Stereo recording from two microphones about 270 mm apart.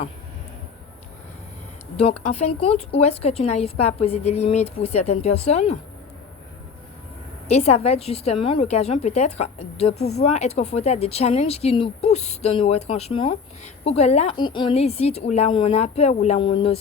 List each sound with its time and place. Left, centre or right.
2.0 s speech: left
7.4 s speech: left
9.9 s speech: left
10.3 s speech: left